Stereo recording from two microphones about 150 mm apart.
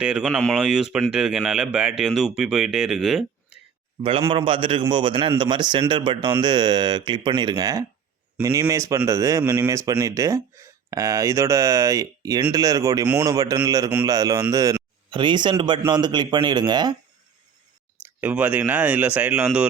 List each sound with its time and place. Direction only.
0.0 s speech: 5° right (ahead or behind)
4.3 s a man's voice: 35° right (ahead or behind)
18.2 s speech: 10° right (ahead or behind)